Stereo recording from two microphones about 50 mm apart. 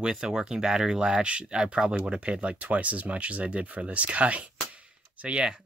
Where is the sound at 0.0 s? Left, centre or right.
Centre.